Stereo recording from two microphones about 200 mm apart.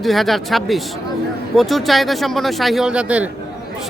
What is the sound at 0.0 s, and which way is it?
Speech, centre (ahead or behind).